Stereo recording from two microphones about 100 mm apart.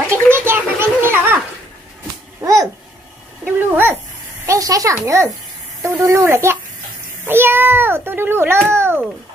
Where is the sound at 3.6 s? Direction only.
20° right (ahead or behind).